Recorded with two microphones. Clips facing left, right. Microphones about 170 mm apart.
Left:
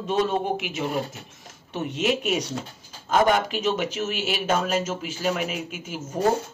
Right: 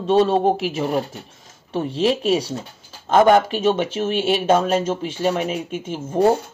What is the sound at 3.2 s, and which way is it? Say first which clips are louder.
Speech: right 7 dB; 50° right (ahead or behind).